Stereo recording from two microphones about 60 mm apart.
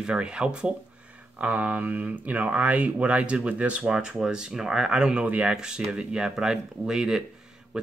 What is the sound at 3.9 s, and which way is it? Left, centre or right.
Speech, centre.